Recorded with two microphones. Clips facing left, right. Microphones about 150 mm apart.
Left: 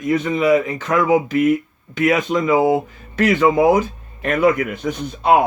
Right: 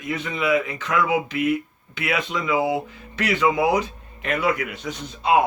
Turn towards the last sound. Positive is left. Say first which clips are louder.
# left 6 dB
turn(degrees=55)  # may be behind; listen again after turning